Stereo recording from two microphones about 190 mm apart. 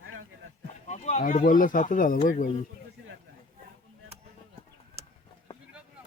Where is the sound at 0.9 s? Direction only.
40° left (ahead or behind).